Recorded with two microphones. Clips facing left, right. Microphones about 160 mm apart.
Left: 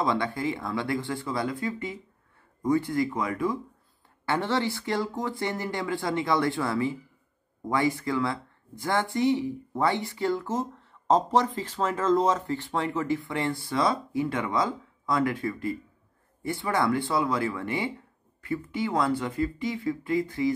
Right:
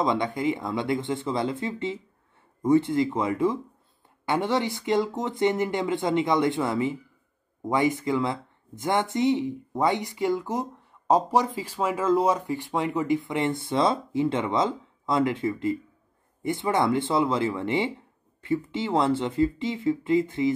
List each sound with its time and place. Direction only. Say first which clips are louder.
0.0 s speech: right 2 dB; 20° right (ahead or behind)